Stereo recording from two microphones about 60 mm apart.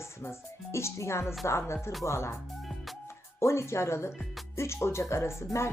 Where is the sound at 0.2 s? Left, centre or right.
Left.